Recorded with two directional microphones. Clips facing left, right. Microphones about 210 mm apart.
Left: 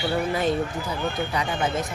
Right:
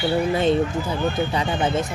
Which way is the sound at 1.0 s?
Centre (ahead or behind).